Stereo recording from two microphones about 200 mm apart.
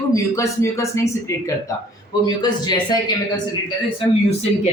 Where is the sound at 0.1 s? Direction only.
15° left (ahead or behind).